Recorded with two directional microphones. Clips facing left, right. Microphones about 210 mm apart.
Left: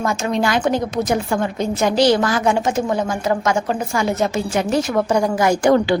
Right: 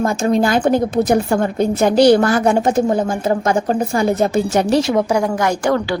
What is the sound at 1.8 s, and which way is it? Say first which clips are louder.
A woman's voice: right 4 dB; 50° right (ahead or behind).